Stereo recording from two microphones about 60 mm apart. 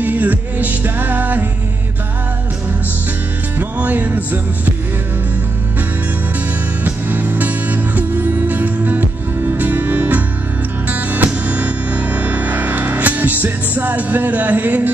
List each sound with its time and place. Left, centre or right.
0.0 s music: right
3.5 s music: right
6.8 s music: right